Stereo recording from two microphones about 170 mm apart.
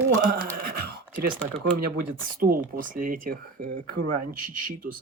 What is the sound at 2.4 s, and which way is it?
Speech, 55° right (ahead or behind).